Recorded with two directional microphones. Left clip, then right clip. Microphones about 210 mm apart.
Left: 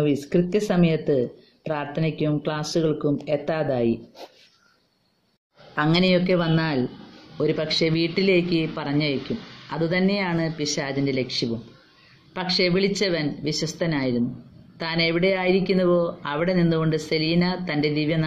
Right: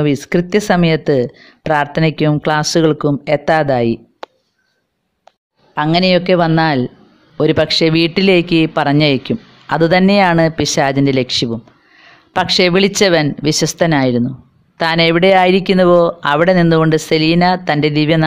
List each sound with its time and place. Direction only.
0.0 s speech: 50° right (ahead or behind)
5.8 s speech: 40° right (ahead or behind)